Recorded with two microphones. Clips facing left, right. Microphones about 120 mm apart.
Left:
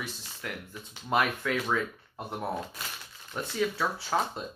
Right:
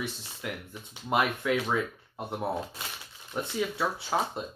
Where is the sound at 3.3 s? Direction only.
10° right (ahead or behind).